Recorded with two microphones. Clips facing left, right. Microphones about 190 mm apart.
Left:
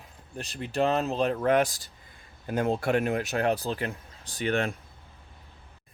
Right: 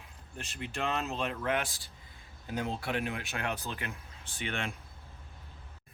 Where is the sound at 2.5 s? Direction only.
50° left (ahead or behind).